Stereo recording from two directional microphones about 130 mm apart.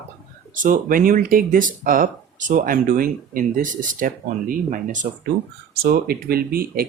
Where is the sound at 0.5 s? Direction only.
90° right.